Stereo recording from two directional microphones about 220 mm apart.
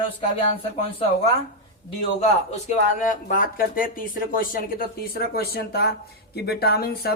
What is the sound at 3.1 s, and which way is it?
Speech, 40° left (ahead or behind).